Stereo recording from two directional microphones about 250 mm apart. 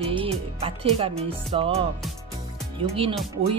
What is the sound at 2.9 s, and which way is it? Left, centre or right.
Speech, right.